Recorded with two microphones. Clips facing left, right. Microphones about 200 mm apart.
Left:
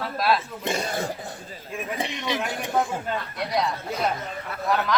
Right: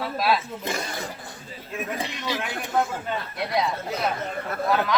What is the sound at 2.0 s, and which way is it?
Speech, 20° left (ahead or behind).